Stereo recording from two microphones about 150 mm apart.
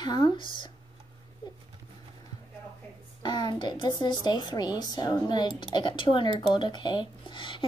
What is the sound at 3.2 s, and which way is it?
A woman's voice, 30° left (ahead or behind).